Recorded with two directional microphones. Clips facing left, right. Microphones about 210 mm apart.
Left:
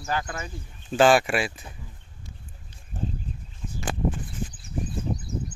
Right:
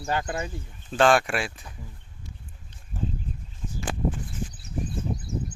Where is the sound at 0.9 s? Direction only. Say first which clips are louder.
Left 2 dB; 5° left (ahead or behind).